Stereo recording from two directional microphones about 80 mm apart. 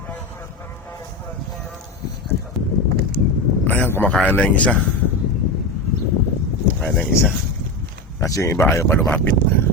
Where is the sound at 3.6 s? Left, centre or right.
Left.